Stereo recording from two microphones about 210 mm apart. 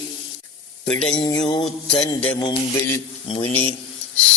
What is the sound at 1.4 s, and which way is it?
Mantra, 25° left (ahead or behind).